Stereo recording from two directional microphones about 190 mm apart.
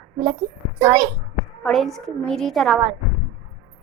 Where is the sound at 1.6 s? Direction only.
Centre (ahead or behind).